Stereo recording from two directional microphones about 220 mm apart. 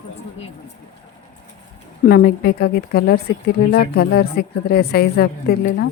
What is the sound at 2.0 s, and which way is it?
A woman's voice, 45° left (ahead or behind).